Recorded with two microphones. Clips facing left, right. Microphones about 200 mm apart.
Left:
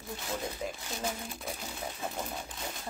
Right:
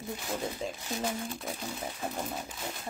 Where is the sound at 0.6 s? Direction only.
25° right (ahead or behind).